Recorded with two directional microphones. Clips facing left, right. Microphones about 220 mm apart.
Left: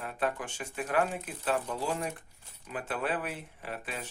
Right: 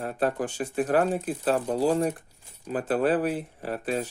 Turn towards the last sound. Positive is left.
turn(degrees=-40)  # may be behind; listen again after turning